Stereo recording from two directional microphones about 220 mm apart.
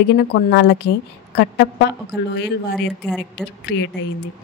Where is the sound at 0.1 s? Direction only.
50° left (ahead or behind).